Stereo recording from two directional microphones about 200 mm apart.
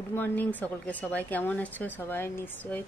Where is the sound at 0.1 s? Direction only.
10° left (ahead or behind).